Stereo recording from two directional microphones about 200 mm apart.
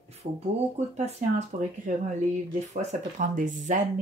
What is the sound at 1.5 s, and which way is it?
Speech, 40° right (ahead or behind).